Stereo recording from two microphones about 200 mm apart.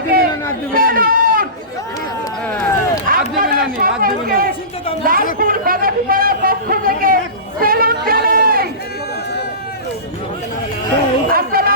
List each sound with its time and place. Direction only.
0.1 s a sound: 50° right (ahead or behind)
0.7 s run: 45° right (ahead or behind)
3.1 s chatter: 45° right (ahead or behind)
5.4 s a sound: 45° right (ahead or behind)
7.6 s chatter: 45° right (ahead or behind)
11.3 s chatter: 45° right (ahead or behind)